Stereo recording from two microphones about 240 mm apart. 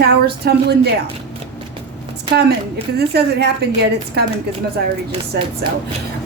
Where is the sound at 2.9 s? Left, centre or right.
Right.